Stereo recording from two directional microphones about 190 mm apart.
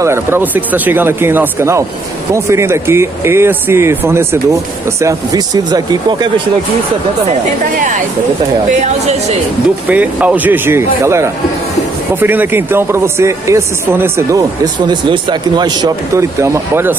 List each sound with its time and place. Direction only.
0.0 s speech: 15° right (ahead or behind)
9.8 s speech: 10° right (ahead or behind)